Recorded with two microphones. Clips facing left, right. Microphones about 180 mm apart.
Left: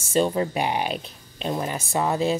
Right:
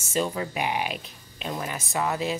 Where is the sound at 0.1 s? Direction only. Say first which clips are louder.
Left 6 dB; 30° left (ahead or behind).